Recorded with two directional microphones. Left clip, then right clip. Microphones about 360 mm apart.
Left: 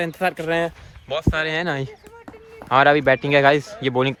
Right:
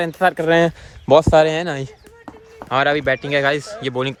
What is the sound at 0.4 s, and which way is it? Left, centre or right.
Speech, right.